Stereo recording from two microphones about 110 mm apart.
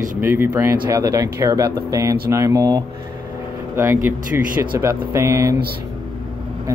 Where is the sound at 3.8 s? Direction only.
25° right (ahead or behind).